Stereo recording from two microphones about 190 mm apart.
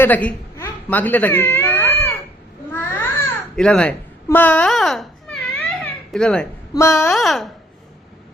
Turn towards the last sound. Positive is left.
turn(degrees=0)  # may be behind; listen again after turning